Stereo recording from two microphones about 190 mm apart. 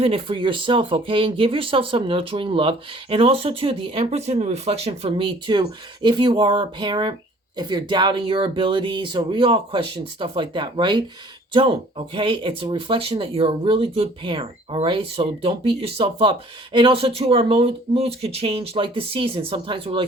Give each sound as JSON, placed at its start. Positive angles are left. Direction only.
{"t": 0.0, "sound": "speech", "side_deg": -30}